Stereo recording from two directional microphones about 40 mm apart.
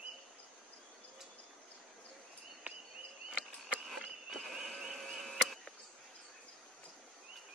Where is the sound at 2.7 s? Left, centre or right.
Right.